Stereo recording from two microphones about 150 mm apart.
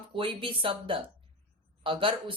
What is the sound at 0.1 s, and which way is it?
Speech, 35° right (ahead or behind).